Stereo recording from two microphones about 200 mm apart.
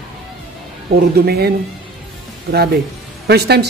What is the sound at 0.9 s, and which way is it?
A woman's voice, 50° right (ahead or behind).